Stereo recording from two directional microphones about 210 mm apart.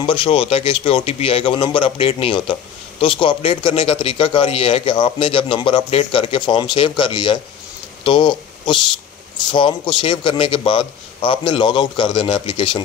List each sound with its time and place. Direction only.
0.0 s a man's voice: 25° left (ahead or behind)